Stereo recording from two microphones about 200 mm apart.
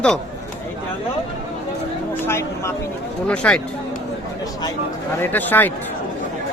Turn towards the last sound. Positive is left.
turn(degrees=10)  # may be behind; listen again after turning